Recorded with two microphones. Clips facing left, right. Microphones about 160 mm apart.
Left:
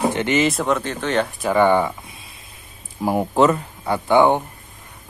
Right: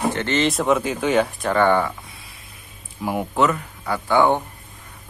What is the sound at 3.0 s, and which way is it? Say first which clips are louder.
Speech: left 4 dB; 35° left (ahead or behind).